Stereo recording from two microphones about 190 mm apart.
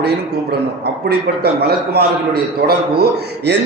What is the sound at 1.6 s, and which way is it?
A man's voice, 55° right (ahead or behind).